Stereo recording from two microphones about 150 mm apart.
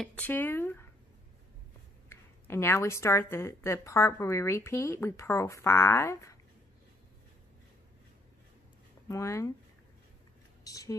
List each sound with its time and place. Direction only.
0.0 s speech: 10° left (ahead or behind)
2.0 s speech: 15° left (ahead or behind)
9.1 s speech: 20° left (ahead or behind)
10.6 s a sound: 25° left (ahead or behind)